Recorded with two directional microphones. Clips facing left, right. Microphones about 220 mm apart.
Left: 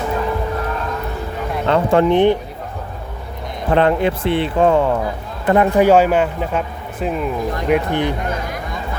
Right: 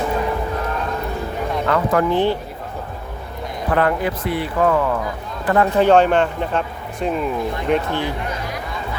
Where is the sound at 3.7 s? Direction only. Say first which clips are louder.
Left 4 dB; 25° left (ahead or behind).